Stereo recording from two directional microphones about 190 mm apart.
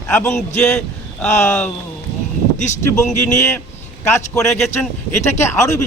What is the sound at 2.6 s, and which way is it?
Speech, 40° left (ahead or behind).